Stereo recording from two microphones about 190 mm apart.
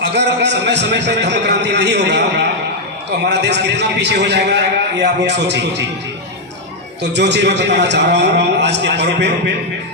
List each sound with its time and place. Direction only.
0.0 s a man's voice: 65° right (ahead or behind)
7.0 s a man's voice: 65° right (ahead or behind)